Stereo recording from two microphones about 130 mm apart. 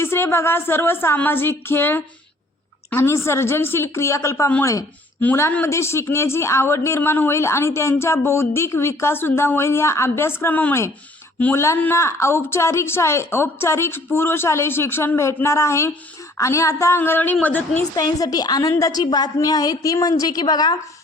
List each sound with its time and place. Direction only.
0.0 s a woman's voice: 20° left (ahead or behind)
5.2 s a woman's voice: 15° left (ahead or behind)
17.9 s a woman's voice: 30° left (ahead or behind)